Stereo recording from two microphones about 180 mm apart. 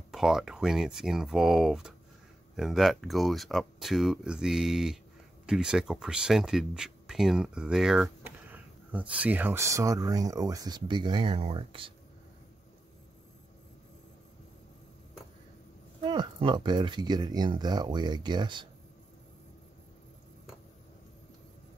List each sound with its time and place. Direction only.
0.1 s speech: centre (ahead or behind); by 11.9 s 30° right (ahead or behind)
16.1 s speech: 25° right (ahead or behind)